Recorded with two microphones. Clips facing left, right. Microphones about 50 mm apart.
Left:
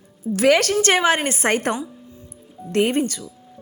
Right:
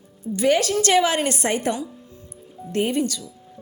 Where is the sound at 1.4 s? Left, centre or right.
Left.